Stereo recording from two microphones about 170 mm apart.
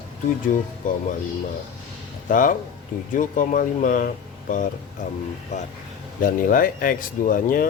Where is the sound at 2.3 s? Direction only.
50° left (ahead or behind).